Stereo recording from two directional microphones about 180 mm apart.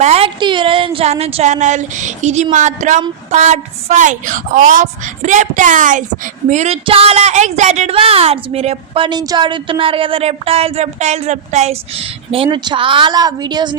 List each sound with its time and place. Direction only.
0.0 s a woman's voice: 35° right (ahead or behind)